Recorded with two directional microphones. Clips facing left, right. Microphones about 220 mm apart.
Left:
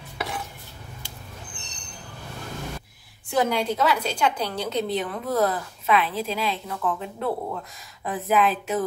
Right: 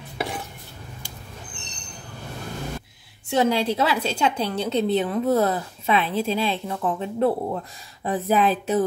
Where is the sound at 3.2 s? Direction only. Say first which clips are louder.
Right 3 dB; 25° right (ahead or behind).